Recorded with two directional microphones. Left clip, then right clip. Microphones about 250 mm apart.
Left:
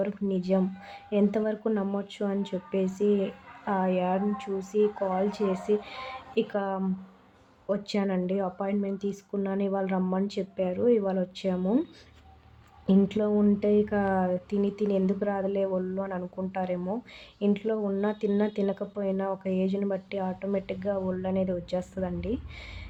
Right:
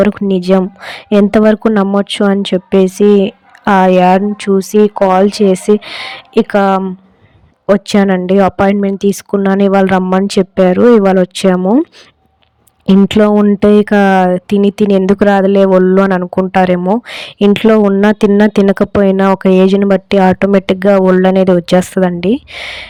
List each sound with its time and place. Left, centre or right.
0.0 s speech: right